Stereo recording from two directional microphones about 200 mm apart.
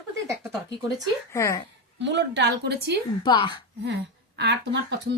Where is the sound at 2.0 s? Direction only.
60° right (ahead or behind).